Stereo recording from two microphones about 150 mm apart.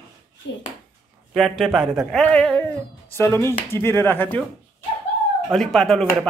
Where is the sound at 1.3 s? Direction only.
Centre (ahead or behind).